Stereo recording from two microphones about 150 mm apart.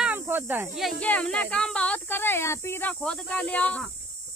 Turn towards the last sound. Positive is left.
turn(degrees=10)  # may be behind; listen again after turning